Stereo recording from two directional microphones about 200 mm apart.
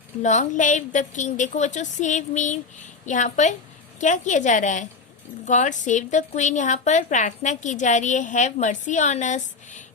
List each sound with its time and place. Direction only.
0.2 s a woman's voice: 35° left (ahead or behind)